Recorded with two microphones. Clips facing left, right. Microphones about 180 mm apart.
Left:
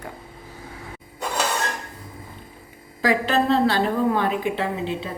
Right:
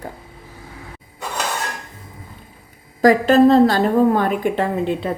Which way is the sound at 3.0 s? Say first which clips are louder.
Right 9 dB; 40° right (ahead or behind).